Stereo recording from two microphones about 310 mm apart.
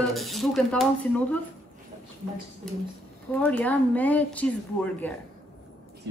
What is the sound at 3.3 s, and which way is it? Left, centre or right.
A woman's voice, centre.